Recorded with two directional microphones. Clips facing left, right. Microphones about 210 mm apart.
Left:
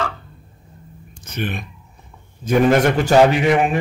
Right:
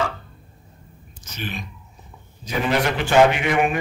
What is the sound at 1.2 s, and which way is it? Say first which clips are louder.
A man's voice: left 6 dB; 55° left (ahead or behind).